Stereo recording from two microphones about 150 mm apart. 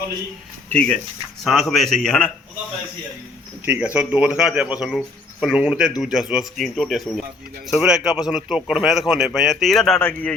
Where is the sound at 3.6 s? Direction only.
10° right (ahead or behind); by 10.4 s 10° left (ahead or behind).